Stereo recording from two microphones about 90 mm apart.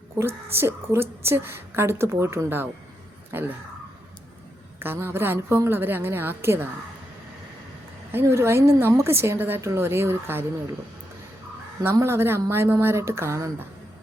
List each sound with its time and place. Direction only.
0.2 s a woman's voice: 25° right (ahead or behind)
4.8 s a woman's voice: 25° right (ahead or behind)
8.1 s a woman's voice: 30° right (ahead or behind)
11.9 s a woman's voice: 30° right (ahead or behind)